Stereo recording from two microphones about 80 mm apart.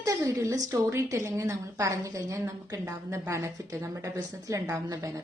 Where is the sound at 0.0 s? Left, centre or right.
Right.